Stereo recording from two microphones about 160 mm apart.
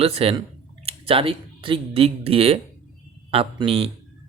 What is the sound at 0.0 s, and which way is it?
A man's voice, 35° right (ahead or behind).